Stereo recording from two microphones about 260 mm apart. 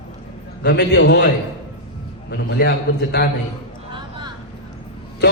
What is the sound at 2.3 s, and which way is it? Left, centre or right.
Speech, left.